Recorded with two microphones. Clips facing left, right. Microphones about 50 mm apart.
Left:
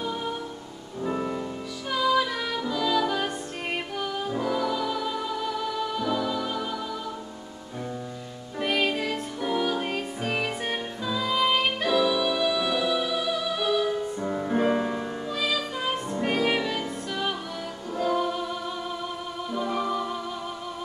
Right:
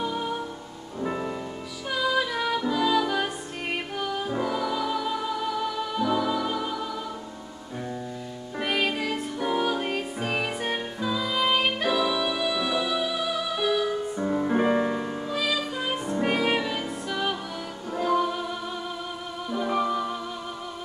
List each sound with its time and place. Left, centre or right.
0.0 s music: centre
8.5 s music: centre